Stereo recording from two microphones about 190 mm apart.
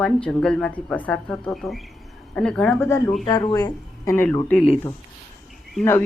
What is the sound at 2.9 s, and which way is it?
Speech, 15° left (ahead or behind).